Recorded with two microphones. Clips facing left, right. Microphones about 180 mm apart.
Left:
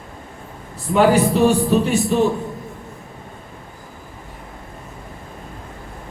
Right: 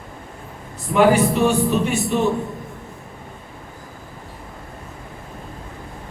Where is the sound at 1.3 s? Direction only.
35° left (ahead or behind).